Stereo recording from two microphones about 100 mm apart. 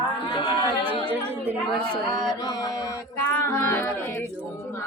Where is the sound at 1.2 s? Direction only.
20° right (ahead or behind).